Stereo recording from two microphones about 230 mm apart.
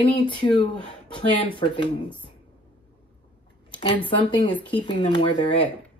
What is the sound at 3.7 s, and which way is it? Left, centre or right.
Speech, left.